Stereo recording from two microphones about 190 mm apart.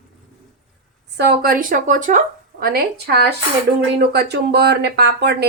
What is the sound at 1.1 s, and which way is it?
A woman's voice, 55° right (ahead or behind).